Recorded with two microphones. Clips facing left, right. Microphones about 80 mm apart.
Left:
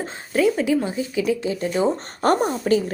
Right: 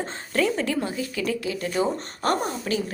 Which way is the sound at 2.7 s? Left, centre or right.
Left.